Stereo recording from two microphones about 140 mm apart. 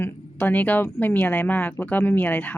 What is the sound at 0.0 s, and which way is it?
Speech, 10° left (ahead or behind).